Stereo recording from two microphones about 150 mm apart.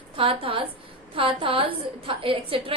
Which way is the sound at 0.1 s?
35° right (ahead or behind).